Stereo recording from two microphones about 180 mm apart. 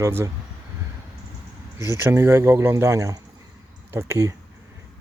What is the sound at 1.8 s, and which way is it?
Speech, 15° right (ahead or behind).